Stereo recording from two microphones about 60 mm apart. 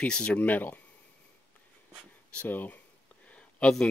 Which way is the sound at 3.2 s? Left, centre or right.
Left.